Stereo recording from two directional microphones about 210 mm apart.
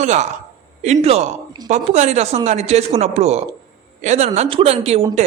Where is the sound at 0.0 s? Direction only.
35° right (ahead or behind).